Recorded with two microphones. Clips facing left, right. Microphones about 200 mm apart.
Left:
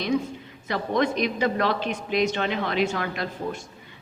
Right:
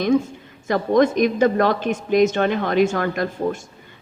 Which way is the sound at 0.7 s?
45° right (ahead or behind).